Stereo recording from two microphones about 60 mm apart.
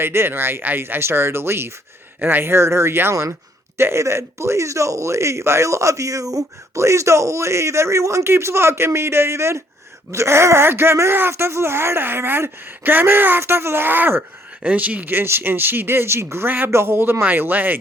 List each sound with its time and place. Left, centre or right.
0.0 s speech: right
16.5 s speech: right